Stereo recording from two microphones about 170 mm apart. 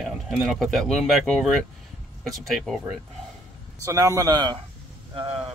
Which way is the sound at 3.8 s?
20° right (ahead or behind).